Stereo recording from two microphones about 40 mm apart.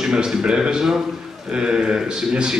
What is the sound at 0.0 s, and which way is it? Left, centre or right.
A man's voice, centre.